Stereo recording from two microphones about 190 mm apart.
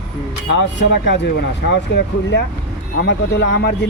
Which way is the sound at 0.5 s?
70° left (ahead or behind).